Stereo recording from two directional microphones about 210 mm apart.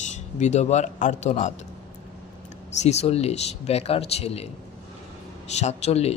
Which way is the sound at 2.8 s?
30° left (ahead or behind).